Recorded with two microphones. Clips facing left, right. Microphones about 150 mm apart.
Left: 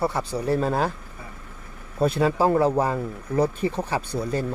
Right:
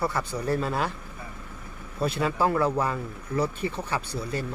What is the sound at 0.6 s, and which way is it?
Speech, 40° left (ahead or behind).